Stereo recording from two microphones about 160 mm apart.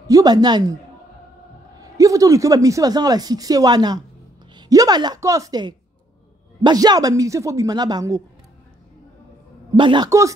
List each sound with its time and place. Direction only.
0.0 s a man's voice: 25° right (ahead or behind)
1.8 s a man's voice: 20° right (ahead or behind)
9.8 s a man's voice: 30° right (ahead or behind)